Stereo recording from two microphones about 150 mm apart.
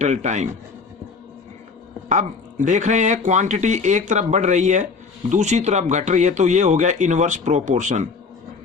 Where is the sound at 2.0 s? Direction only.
55° right (ahead or behind).